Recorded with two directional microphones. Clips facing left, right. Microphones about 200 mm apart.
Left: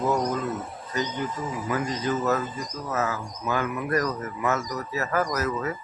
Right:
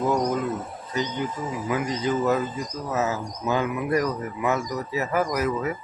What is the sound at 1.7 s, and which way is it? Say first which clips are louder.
Speech: right 2 dB; 15° right (ahead or behind).